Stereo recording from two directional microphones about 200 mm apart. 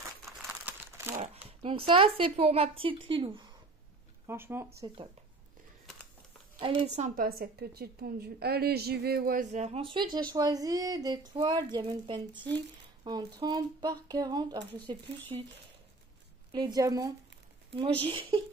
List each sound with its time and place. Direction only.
0.2 s crumpling: 5° right (ahead or behind)
1.1 s a sound: 30° right (ahead or behind)
1.6 s speech: 25° right (ahead or behind)
4.3 s a woman's voice: 10° right (ahead or behind)
4.8 s speech: 20° right (ahead or behind)
6.6 s speech: 25° right (ahead or behind)
7.2 s a woman's voice: 50° right (ahead or behind); by 15.0 s 20° right (ahead or behind)
16.5 s a woman's voice: 20° right (ahead or behind)